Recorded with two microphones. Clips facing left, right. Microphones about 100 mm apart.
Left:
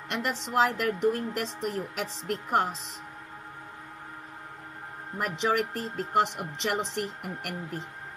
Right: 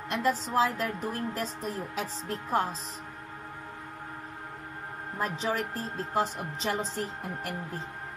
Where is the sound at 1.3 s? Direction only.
90° left.